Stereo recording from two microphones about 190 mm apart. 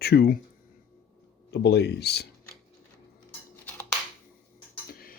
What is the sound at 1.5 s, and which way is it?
Speech, 60° left (ahead or behind).